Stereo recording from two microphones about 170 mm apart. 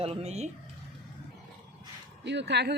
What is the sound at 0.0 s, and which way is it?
Speech, 40° right (ahead or behind).